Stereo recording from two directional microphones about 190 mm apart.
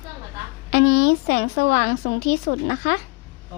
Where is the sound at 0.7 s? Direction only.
50° left (ahead or behind).